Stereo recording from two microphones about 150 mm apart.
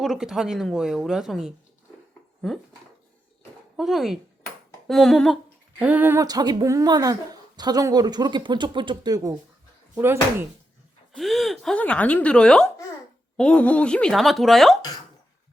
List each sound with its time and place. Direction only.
0.0 s a woman's voice: centre (ahead or behind)
3.8 s a woman's voice: centre (ahead or behind)
5.8 s speech: 10° right (ahead or behind)
6.2 s a woman's voice: 25° right (ahead or behind)
11.1 s a woman's voice: centre (ahead or behind)